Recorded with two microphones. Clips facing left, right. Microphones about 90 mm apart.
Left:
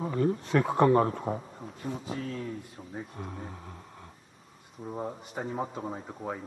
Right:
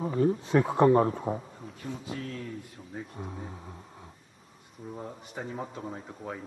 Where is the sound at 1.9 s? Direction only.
5° left (ahead or behind).